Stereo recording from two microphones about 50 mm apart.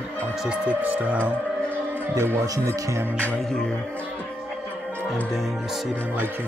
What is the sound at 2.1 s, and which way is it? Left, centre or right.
Speech, right.